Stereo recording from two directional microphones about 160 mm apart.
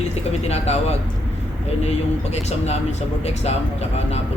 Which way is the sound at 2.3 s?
45° left (ahead or behind).